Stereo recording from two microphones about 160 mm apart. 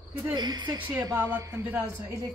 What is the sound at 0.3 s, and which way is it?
Speech, 25° right (ahead or behind).